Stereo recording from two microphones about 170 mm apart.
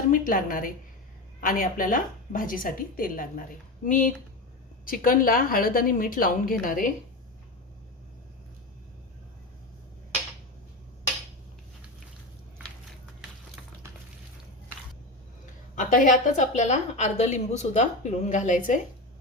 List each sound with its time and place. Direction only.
0.1 s a woman's voice: 55° left (ahead or behind)
15.7 s a woman's voice: 50° left (ahead or behind)